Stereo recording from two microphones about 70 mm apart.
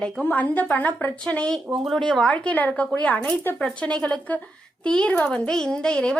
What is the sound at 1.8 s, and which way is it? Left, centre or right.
Speech, centre.